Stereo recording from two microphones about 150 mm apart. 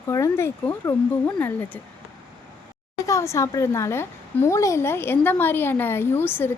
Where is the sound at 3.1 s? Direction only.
20° left (ahead or behind).